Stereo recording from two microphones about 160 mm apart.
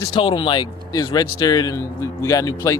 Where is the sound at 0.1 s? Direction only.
30° left (ahead or behind).